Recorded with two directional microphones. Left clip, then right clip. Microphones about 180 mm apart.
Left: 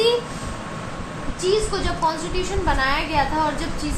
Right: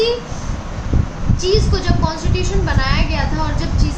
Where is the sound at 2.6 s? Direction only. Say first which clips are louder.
Left 3 dB; 45° left (ahead or behind).